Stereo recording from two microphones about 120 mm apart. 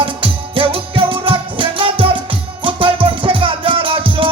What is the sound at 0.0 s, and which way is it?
Music, 45° right (ahead or behind).